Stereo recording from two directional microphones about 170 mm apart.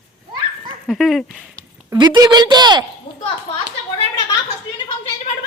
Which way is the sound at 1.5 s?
20° right (ahead or behind).